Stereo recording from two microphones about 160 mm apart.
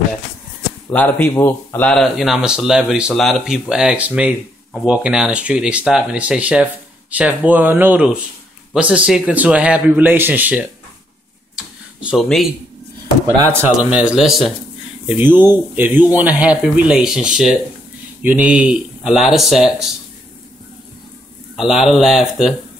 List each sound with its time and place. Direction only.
0.8 s speech: 10° left (ahead or behind); by 10.7 s 10° right (ahead or behind)
11.5 s tick-tock: 5° right (ahead or behind)
13.9 s speech: 5° right (ahead or behind)
21.5 s speech: centre (ahead or behind)